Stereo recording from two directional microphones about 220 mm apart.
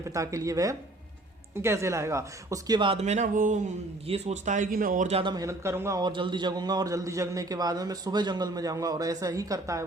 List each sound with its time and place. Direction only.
0.1 s speech: 15° right (ahead or behind)